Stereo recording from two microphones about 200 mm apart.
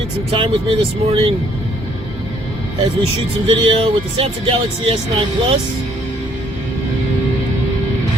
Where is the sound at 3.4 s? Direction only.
25° right (ahead or behind).